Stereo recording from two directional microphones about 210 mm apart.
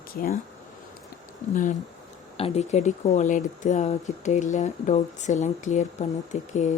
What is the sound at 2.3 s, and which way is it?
Speech, 30° left (ahead or behind).